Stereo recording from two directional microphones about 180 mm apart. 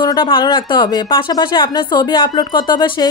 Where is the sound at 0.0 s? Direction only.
25° left (ahead or behind).